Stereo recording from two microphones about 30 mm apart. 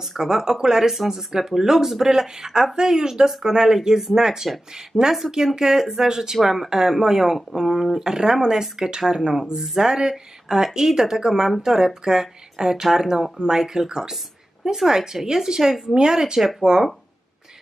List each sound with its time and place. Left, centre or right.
0.2 s speech: centre
6.3 s speech: centre
16.3 s speech: centre